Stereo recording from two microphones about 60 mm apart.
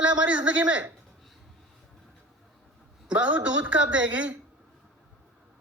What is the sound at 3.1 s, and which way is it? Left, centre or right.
Speech, right.